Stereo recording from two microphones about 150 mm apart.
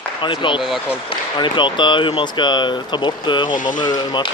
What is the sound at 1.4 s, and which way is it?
Speech, 30° left (ahead or behind).